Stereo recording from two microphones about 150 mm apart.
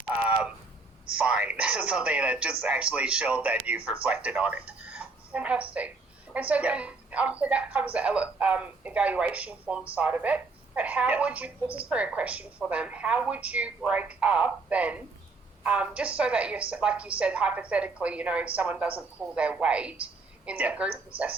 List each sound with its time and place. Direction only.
1.1 s a woman's voice: 5° right (ahead or behind)